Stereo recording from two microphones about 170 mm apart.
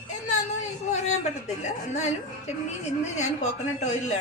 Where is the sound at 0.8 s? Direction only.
45° left (ahead or behind).